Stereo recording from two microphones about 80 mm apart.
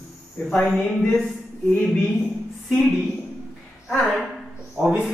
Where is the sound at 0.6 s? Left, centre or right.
Centre.